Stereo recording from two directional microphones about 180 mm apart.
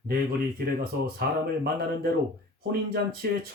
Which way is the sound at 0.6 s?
65° right (ahead or behind).